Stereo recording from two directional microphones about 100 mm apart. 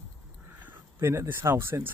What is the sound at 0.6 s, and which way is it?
Speech, 20° right (ahead or behind).